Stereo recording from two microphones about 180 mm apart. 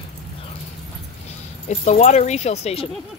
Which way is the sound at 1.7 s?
40° left (ahead or behind).